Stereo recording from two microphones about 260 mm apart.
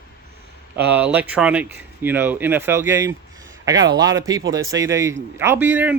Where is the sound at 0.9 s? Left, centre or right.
Centre.